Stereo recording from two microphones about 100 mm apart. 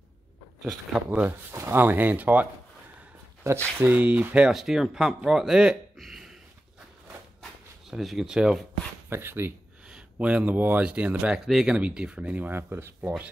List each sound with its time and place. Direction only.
0.6 s speech: centre (ahead or behind)
1.5 s speech: 25° right (ahead or behind)
3.7 s speech: 20° right (ahead or behind)
4.5 s speech: 5° right (ahead or behind)
5.9 s a sound: centre (ahead or behind)
7.8 s speech: centre (ahead or behind)
9.1 s speech: 20° right (ahead or behind)
11.3 s speech: centre (ahead or behind); by 13.1 s 25° right (ahead or behind)